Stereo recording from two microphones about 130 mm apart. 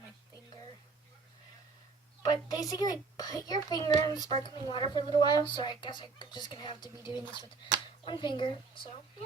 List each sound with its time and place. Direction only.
2.5 s a child's voice: 30° left (ahead or behind)